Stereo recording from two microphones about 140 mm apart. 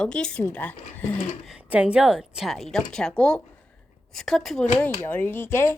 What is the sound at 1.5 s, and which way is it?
Speech, 10° right (ahead or behind).